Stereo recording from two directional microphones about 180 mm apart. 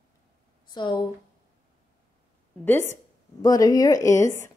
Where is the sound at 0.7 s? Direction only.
25° left (ahead or behind).